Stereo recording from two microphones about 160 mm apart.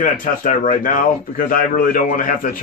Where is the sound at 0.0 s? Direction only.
55° left (ahead or behind).